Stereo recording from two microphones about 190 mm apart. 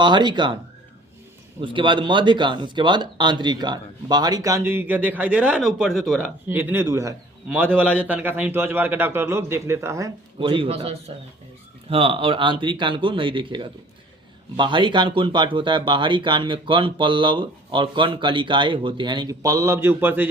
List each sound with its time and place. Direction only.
0.0 s speech: 25° right (ahead or behind)
1.6 s speech: 25° right (ahead or behind)